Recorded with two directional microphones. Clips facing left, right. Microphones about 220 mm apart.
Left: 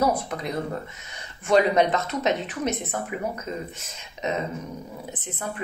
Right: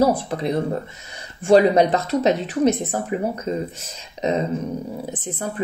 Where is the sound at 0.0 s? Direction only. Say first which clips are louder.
Right 5 dB; 30° right (ahead or behind).